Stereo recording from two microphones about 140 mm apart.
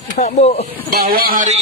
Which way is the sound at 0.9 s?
90° right.